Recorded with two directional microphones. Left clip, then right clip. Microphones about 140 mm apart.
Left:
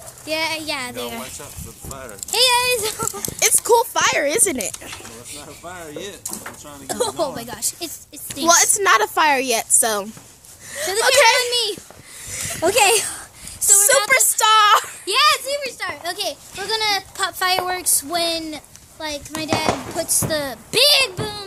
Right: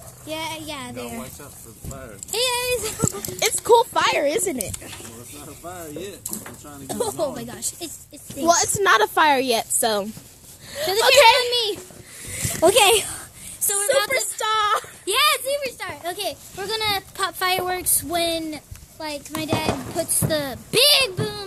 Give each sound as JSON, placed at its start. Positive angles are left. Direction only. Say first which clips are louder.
{"t": 0.3, "sound": "a child's voice", "louder": "left 7 dB", "side_deg": 25}
{"t": 0.9, "sound": "speech", "louder": "left 4 dB", "side_deg": 35}
{"t": 2.3, "sound": "speech", "louder": "left 6 dB", "side_deg": 5}
{"t": 5.6, "sound": "speech", "louder": "left 1 dB", "side_deg": 5}
{"t": 6.2, "sound": "speech", "louder": "left 3 dB", "side_deg": -25}
{"t": 6.9, "sound": "speech", "louder": "left 3 dB", "side_deg": 10}
{"t": 11.1, "sound": "speech", "louder": "right 1 dB", "side_deg": -10}
{"t": 12.3, "sound": "a sound", "louder": "right 2 dB", "side_deg": -15}
{"t": 12.9, "sound": "speech", "louder": "even", "side_deg": 0}
{"t": 14.4, "sound": "a sound", "louder": "left 8 dB", "side_deg": 5}
{"t": 15.0, "sound": "speech", "louder": "left 2 dB", "side_deg": -15}
{"t": 16.0, "sound": "speech", "louder": "left 2 dB", "side_deg": 5}